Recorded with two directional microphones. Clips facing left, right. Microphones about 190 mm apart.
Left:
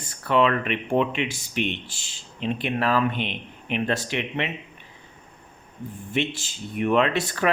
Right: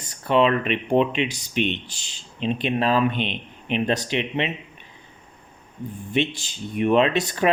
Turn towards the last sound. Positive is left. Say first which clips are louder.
# right 3 dB
turn(degrees=-20)  # may be behind; listen again after turning